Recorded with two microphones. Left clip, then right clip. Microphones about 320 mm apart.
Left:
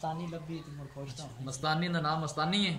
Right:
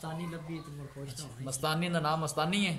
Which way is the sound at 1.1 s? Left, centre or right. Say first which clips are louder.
Right 1 dB; centre.